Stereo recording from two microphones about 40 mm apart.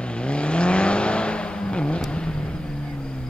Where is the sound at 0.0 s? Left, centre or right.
Left.